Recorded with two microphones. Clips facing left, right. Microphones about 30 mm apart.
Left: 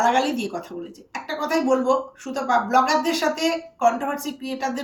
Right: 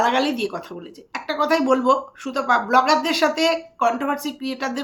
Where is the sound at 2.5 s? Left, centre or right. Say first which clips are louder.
Right 2 dB; right.